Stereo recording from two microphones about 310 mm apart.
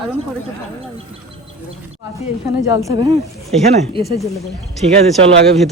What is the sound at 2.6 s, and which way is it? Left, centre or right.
Speech, centre.